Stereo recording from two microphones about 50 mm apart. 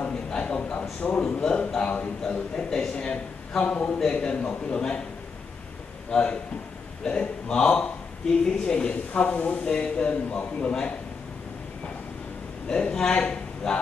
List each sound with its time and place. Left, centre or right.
0.1 s a sound: centre
1.4 s a man's voice: centre
6.0 s a man's voice: centre
12.6 s speech: centre